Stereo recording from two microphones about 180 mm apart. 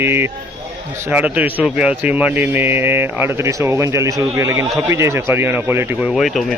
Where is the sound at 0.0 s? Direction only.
10° right (ahead or behind).